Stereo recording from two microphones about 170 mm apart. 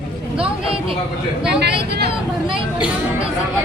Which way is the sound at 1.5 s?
75° right (ahead or behind).